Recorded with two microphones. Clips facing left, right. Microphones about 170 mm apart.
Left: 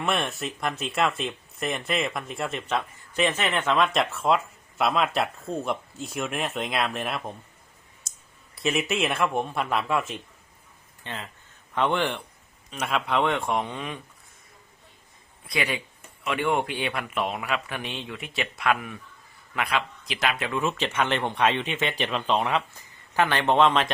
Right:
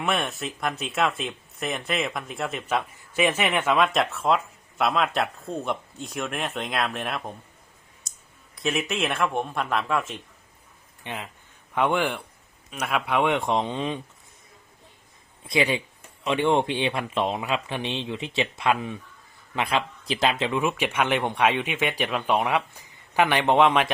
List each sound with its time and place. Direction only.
0.0 s speech: centre (ahead or behind)
8.5 s speech: centre (ahead or behind)
11.0 s speech: 15° right (ahead or behind)
15.4 s speech: 25° right (ahead or behind)
20.4 s speech: 15° right (ahead or behind)